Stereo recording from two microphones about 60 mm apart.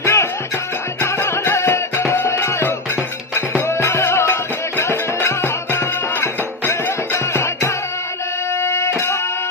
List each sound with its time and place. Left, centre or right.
0.0 s music: left
1.7 s music: left
2.2 s music: left
8.6 s music: left